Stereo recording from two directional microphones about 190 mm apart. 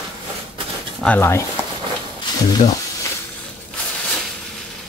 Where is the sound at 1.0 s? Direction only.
10° left (ahead or behind).